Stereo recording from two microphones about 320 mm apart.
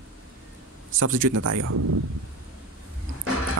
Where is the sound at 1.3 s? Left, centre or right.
Right.